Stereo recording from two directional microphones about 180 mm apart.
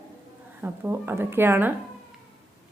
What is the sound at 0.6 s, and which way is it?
A woman's voice, 10° right (ahead or behind).